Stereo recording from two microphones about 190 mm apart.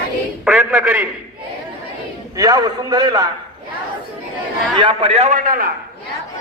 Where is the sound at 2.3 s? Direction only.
20° right (ahead or behind).